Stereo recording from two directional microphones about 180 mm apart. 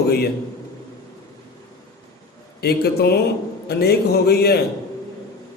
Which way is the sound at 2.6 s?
60° left (ahead or behind).